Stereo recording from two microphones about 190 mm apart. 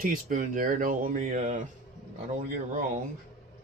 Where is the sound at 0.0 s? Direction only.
45° right (ahead or behind).